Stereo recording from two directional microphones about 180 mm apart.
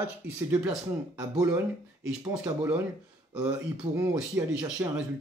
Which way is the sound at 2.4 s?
10° right (ahead or behind).